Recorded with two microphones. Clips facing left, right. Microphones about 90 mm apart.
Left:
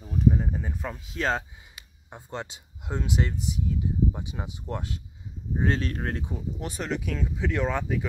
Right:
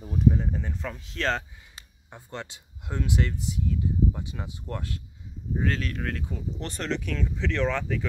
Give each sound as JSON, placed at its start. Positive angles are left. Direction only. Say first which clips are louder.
{"t": 0.0, "sound": "a sound", "louder": "even", "side_deg": -5}
{"t": 0.3, "sound": "speech", "louder": "even", "side_deg": 10}
{"t": 6.2, "sound": "speech", "louder": "left 1 dB", "side_deg": 10}